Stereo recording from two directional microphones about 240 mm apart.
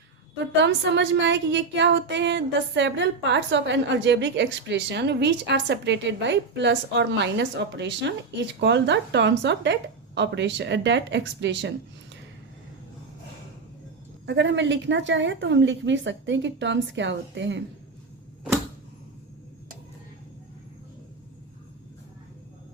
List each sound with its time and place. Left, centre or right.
0.6 s speech: right
14.3 s speech: right